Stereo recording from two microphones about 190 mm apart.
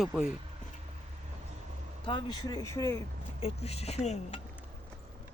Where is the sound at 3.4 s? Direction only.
30° left (ahead or behind).